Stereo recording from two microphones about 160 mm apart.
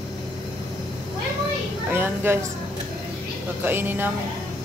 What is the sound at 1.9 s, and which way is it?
Speech, 15° right (ahead or behind).